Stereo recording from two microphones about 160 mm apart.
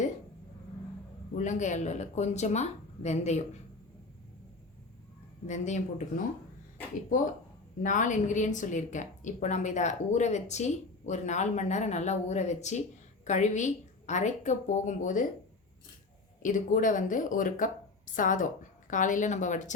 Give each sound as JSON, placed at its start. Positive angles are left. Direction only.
{"t": 1.4, "sound": "a woman's voice", "side_deg": 50}
{"t": 5.5, "sound": "a woman's voice", "side_deg": 45}
{"t": 7.1, "sound": "a woman's voice", "side_deg": 55}
{"t": 16.4, "sound": "a woman's voice", "side_deg": 55}